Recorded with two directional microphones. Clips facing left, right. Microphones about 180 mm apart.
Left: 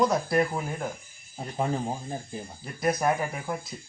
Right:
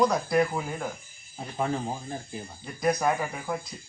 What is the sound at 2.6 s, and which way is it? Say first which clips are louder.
Speech: right 1 dB; 5° left (ahead or behind).